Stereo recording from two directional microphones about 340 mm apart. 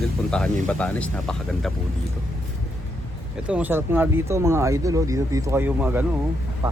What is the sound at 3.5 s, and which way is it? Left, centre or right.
A man's voice, centre.